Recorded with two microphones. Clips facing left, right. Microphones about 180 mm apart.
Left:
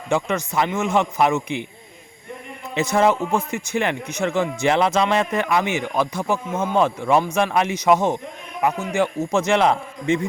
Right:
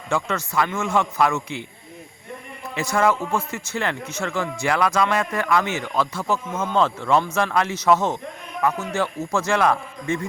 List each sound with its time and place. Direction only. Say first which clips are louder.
0.1 s a man's voice: left 3 dB; 20° left (ahead or behind)
2.7 s a man's voice: left 3 dB; 20° left (ahead or behind)